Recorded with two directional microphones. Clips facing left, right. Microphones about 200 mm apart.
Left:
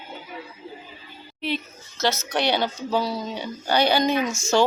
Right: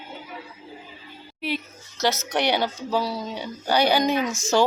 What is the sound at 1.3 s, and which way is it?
Speech, 10° right (ahead or behind).